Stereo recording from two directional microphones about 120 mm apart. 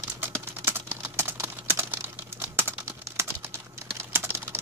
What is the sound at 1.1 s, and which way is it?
Computer keyboard, 20° right (ahead or behind).